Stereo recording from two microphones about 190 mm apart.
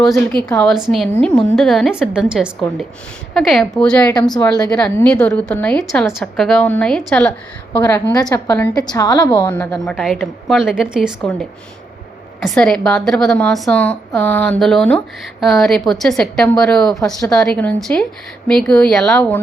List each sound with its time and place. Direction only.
0.0 s a woman's voice: centre (ahead or behind)
8.1 s a woman's voice: 20° left (ahead or behind)
9.3 s a woman's voice: 10° left (ahead or behind)